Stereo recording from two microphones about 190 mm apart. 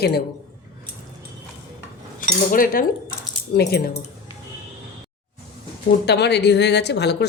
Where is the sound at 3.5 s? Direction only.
55° left (ahead or behind).